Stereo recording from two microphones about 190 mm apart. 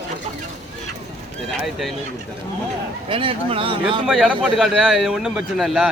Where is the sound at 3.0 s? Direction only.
30° right (ahead or behind).